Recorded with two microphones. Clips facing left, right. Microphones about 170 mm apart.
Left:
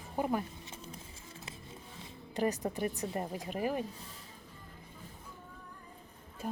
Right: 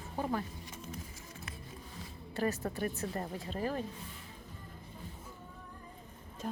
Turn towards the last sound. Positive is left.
turn(degrees=10)  # may be behind; listen again after turning